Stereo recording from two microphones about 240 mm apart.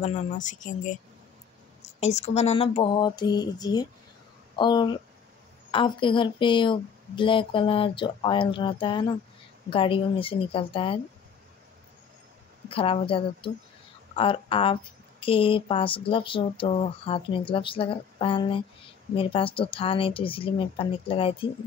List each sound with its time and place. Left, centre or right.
0.4 s speech: left
2.0 s speech: left
12.6 s speech: left